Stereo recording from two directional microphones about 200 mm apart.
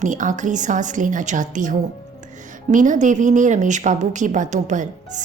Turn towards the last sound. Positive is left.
turn(degrees=-40)  # may be behind; listen again after turning